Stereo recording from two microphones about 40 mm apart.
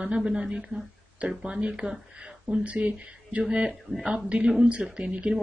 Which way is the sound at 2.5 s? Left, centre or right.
Right.